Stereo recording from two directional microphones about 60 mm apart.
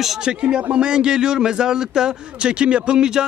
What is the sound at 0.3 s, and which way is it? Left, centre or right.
A man's voice, centre.